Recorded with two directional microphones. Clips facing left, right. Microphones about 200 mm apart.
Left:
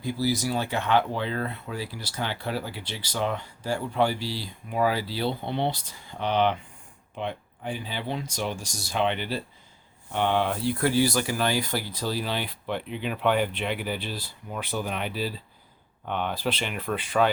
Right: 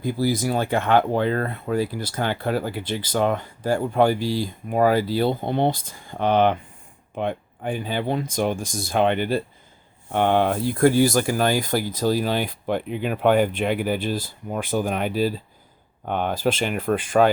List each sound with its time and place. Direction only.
0.0 s speech: 50° right (ahead or behind)